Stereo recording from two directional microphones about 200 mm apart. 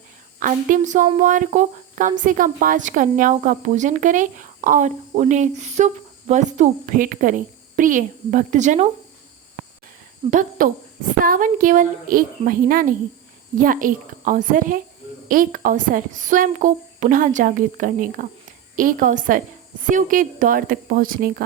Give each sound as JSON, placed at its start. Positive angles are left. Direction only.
{"t": 0.3, "sound": "a woman's voice", "side_deg": -40}
{"t": 10.2, "sound": "speech", "side_deg": -25}
{"t": 10.6, "sound": "a woman's voice", "side_deg": -45}